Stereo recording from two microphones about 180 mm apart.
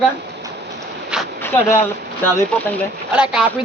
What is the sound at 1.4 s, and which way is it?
A man's voice, 10° left (ahead or behind).